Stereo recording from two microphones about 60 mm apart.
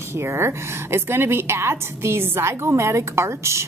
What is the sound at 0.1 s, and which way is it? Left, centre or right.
A woman's voice, right.